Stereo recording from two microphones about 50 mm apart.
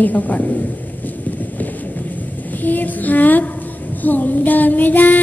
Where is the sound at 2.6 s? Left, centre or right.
Left.